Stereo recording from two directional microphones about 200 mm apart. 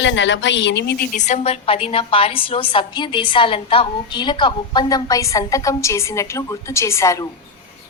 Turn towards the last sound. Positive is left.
turn(degrees=15)  # may be behind; listen again after turning